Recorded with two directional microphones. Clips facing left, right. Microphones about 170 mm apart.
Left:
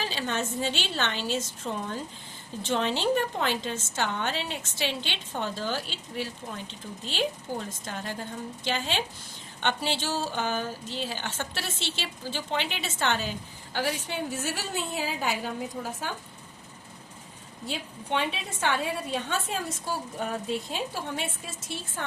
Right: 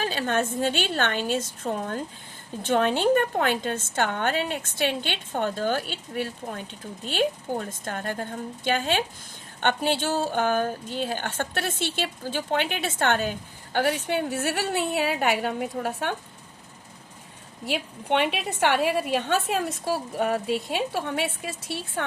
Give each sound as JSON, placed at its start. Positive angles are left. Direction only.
{"t": 0.0, "sound": "a woman's voice", "side_deg": -50}
{"t": 17.7, "sound": "a woman's voice", "side_deg": -65}